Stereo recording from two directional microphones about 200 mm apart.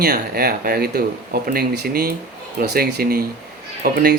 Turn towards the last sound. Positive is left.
turn(degrees=-50)  # may be behind; listen again after turning